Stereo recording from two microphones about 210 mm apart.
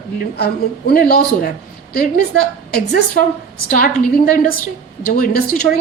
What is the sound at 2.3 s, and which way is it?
Speech, 70° right (ahead or behind).